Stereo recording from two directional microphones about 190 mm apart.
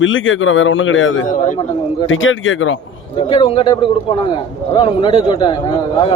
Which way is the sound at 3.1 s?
30° left (ahead or behind).